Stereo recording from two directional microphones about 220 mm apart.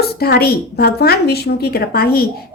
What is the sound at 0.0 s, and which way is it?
Speech, 45° left (ahead or behind).